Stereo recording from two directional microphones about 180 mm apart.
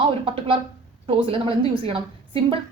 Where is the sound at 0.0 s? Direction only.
30° right (ahead or behind).